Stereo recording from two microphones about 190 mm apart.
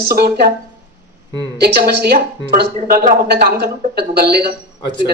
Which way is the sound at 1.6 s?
55° right (ahead or behind).